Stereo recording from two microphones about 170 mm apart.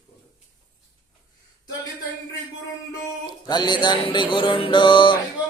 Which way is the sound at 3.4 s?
25° left (ahead or behind).